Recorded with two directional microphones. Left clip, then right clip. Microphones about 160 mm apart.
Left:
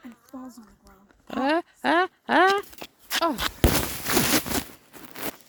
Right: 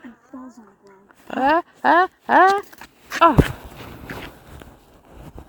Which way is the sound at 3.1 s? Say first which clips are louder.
Right 10 dB; 10° right (ahead or behind).